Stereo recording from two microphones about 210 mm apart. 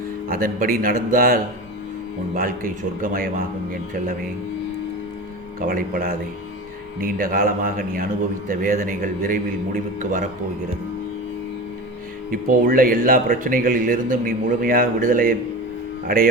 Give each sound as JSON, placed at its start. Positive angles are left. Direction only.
{"t": 0.3, "sound": "speech", "side_deg": -40}
{"t": 5.5, "sound": "speech", "side_deg": -40}
{"t": 12.3, "sound": "speech", "side_deg": -40}